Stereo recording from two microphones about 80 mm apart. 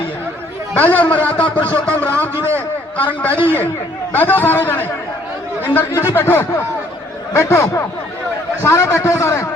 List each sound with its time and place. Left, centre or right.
0.8 s a man's voice: left
7.3 s a man's voice: left